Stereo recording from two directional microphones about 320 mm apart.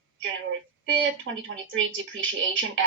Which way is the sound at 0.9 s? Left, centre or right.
Right.